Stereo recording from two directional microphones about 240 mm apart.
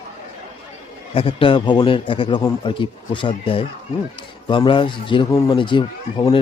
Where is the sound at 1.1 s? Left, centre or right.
Left.